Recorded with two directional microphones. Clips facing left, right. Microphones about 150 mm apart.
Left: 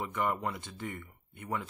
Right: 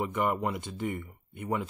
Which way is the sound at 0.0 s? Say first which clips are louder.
Right 4 dB; 15° right (ahead or behind).